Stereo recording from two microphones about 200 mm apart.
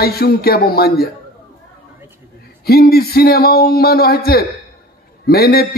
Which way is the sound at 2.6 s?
50° left (ahead or behind).